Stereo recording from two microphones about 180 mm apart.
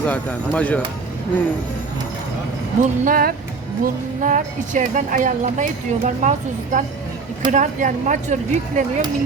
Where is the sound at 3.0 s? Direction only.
50° right (ahead or behind).